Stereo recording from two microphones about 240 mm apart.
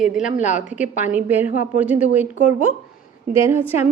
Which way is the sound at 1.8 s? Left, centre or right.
Centre.